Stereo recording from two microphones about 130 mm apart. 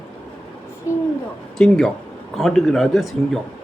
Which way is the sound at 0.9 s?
20° left (ahead or behind).